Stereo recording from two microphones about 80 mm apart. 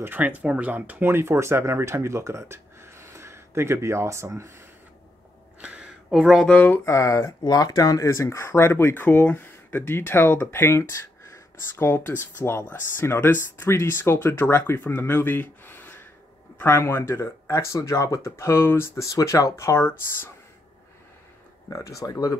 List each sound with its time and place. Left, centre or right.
0.0 s speech: right
5.6 s a sound: centre
6.4 s speech: centre
6.8 s speech: left
7.4 s speech: left
19.0 s speech: left
21.6 s speech: left